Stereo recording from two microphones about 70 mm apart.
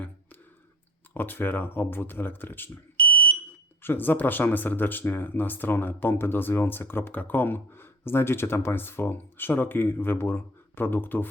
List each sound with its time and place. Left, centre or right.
1.1 s speech: left
3.1 s smoke detector: left
3.8 s speech: left